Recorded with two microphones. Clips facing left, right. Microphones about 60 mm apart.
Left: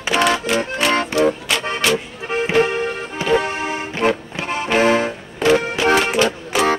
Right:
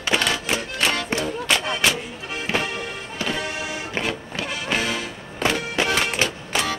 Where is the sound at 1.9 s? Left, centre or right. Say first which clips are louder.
Left 6 dB; left.